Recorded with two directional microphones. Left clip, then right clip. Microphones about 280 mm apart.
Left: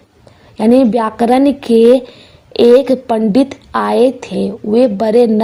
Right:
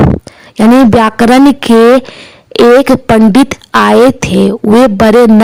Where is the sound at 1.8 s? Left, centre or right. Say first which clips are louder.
Right 3 dB; right.